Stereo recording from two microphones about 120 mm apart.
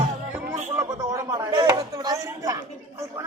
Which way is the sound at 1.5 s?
35° right (ahead or behind).